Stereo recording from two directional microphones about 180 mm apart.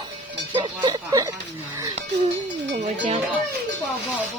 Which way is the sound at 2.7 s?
35° right (ahead or behind).